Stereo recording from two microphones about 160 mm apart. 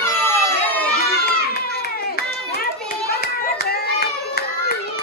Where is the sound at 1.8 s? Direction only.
75° left (ahead or behind).